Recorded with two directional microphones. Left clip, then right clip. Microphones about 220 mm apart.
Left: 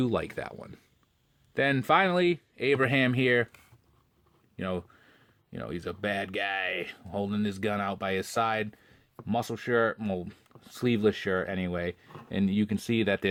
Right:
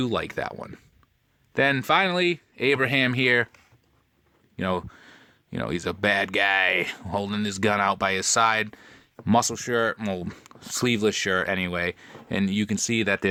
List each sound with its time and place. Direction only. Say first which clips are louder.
0.0 s speech: right 3 dB; 15° right (ahead or behind)
4.5 s speech: right 7 dB; 25° right (ahead or behind)